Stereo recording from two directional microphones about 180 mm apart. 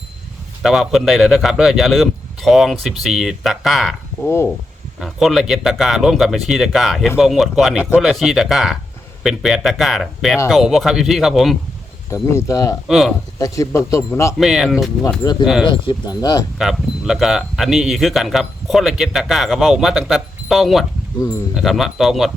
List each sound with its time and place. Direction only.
0.6 s speech: centre (ahead or behind)
4.3 s a man's voice: 15° left (ahead or behind)
4.9 s speech: centre (ahead or behind)
12.1 s a man's voice: 15° left (ahead or behind)
12.9 s speech: centre (ahead or behind)
13.4 s a man's voice: 15° left (ahead or behind)
14.3 s speech: centre (ahead or behind)
15.2 s speech: 25° left (ahead or behind)
16.6 s speech: centre (ahead or behind)